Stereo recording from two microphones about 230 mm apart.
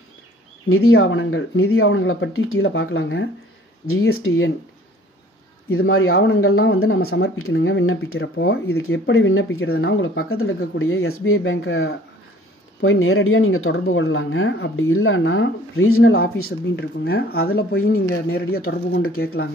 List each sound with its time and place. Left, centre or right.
0.7 s speech: left
3.8 s speech: left
5.7 s speech: left
7.5 s speech: left
16.2 s speech: left